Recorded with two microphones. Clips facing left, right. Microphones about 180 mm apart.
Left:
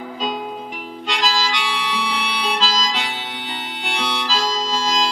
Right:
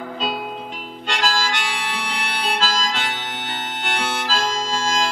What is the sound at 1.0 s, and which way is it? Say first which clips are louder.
Harmonica: even; 50° right (ahead or behind).